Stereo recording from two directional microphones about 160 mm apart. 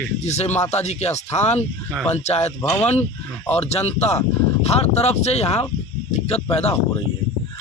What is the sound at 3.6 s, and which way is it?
Speech, 40° left (ahead or behind).